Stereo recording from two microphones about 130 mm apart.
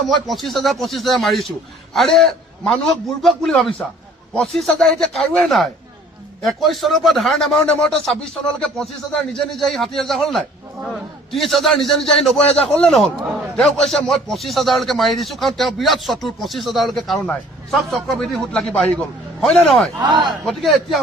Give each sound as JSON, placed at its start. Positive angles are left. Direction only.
{"t": 0.1, "sound": "speech", "side_deg": 0}
{"t": 20.0, "sound": "a man's voice", "side_deg": -35}
{"t": 20.2, "sound": "speech", "side_deg": 0}